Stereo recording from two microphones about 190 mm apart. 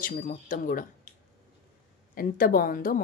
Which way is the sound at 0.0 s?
50° left (ahead or behind).